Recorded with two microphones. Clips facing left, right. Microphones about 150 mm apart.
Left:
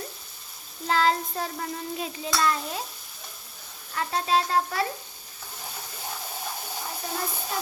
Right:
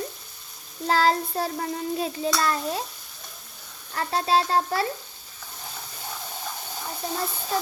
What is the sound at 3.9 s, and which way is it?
Child singing, 35° right (ahead or behind).